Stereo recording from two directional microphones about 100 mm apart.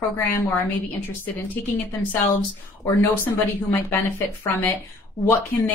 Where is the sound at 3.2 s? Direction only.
25° left (ahead or behind).